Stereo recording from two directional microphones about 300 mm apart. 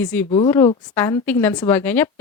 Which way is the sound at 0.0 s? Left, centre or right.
Centre.